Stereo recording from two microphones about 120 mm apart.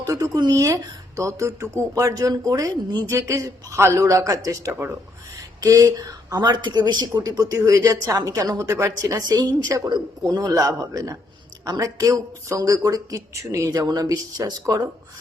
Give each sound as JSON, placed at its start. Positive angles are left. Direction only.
{"t": 0.0, "sound": "speech", "side_deg": -30}